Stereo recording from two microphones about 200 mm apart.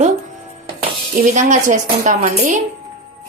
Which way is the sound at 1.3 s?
40° right (ahead or behind).